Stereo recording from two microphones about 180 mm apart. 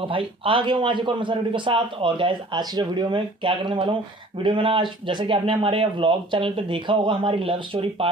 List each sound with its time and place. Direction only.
0.0 s a man's voice: 30° right (ahead or behind)